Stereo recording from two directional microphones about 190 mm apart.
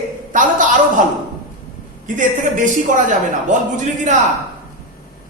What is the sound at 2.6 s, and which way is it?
Speech, 40° right (ahead or behind).